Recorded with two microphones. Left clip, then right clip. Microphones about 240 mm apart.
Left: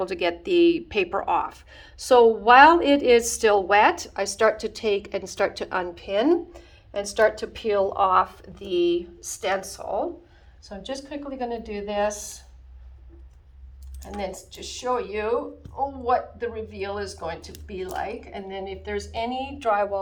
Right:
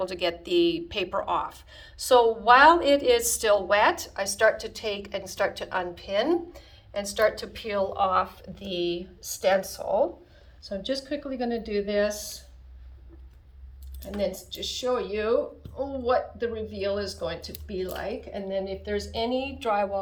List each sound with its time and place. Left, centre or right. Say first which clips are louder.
0.0 s a woman's voice: left 3 dB; centre
10.6 s a woman's voice: right 3 dB; centre
14.2 s a woman's voice: right 3 dB; centre